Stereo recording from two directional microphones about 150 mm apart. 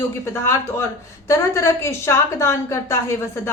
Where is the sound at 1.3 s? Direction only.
20° left (ahead or behind).